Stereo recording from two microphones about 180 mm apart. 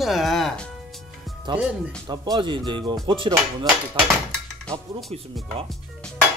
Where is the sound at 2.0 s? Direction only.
25° right (ahead or behind).